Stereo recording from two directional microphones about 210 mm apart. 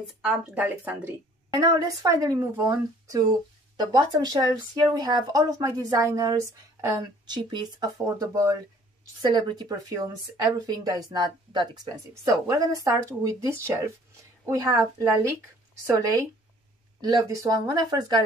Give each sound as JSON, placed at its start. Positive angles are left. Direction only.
{"t": 0.2, "sound": "speech", "side_deg": -5}